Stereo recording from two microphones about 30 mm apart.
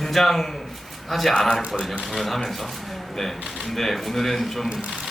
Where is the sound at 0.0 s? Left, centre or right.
Centre.